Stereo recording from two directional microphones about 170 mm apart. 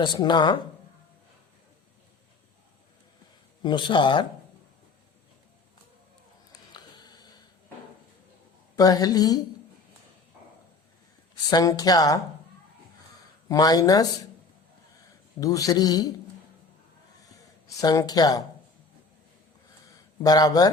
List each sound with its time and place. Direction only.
0.0 s speech: 25° left (ahead or behind)
3.6 s speech: 25° left (ahead or behind)
6.5 s a sound: 25° left (ahead or behind)
8.7 s speech: 20° left (ahead or behind)
11.5 s speech: 20° left (ahead or behind)
13.5 s speech: 20° left (ahead or behind)
15.4 s speech: 20° left (ahead or behind)
17.7 s speech: 20° left (ahead or behind)
20.2 s speech: 20° left (ahead or behind)